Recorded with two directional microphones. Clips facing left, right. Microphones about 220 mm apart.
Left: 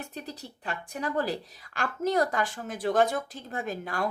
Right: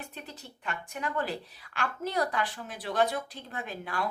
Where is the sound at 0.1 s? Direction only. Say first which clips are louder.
Left 5 dB; 40° left (ahead or behind).